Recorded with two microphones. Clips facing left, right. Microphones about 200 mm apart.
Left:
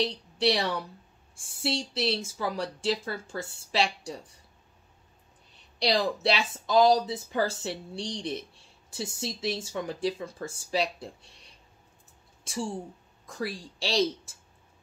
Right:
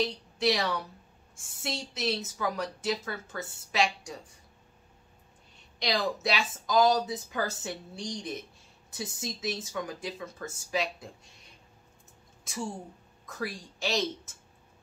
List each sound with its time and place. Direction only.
0.0 s a woman's voice: 30° left (ahead or behind)
5.8 s speech: 30° left (ahead or behind)
12.4 s speech: 30° left (ahead or behind)